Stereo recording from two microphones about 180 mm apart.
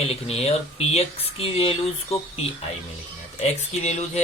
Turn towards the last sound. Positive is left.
turn(degrees=40)  # may be behind; listen again after turning